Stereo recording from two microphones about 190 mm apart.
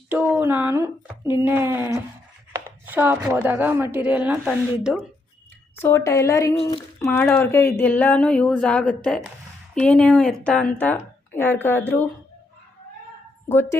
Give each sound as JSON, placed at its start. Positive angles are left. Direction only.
{"t": 0.1, "sound": "a woman's voice", "side_deg": -10}
{"t": 5.7, "sound": "a woman's voice", "side_deg": 10}
{"t": 13.5, "sound": "a woman's voice", "side_deg": 10}